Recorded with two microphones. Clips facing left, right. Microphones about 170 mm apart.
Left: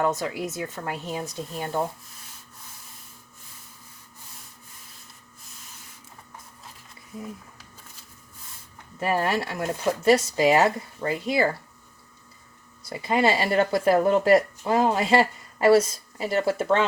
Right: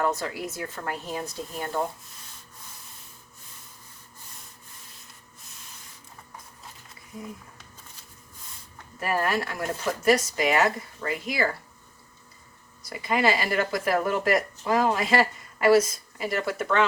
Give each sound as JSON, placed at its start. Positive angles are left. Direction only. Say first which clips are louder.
{"t": 0.0, "sound": "speech", "louder": "left 2 dB", "side_deg": 20}
{"t": 9.0, "sound": "speech", "louder": "left 2 dB", "side_deg": 25}
{"t": 12.9, "sound": "speech", "louder": "left 2 dB", "side_deg": 30}